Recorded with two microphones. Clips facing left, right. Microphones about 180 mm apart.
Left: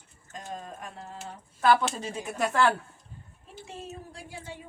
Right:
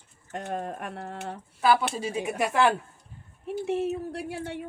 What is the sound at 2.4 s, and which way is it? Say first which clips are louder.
Speech: right 1 dB; 15° right (ahead or behind).